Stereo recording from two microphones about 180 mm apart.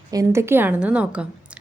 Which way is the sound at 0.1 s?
15° right (ahead or behind).